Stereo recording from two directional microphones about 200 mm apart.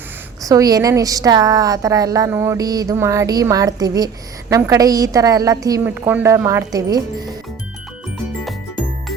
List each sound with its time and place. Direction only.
0.4 s speech: 15° right (ahead or behind)